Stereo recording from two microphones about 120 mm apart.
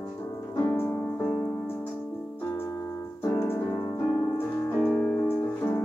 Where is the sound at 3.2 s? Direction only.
20° left (ahead or behind).